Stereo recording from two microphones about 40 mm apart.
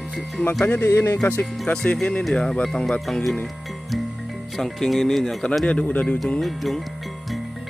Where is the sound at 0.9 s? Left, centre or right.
Left.